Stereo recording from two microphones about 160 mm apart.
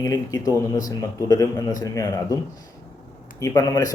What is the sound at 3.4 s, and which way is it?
Speech, 20° left (ahead or behind).